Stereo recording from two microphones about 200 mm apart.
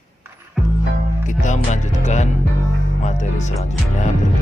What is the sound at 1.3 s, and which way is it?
Music, 35° left (ahead or behind).